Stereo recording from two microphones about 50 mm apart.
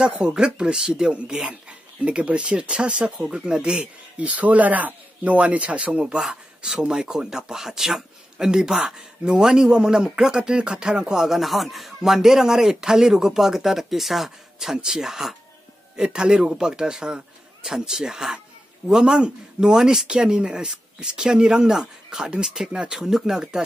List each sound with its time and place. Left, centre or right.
0.0 s speech: centre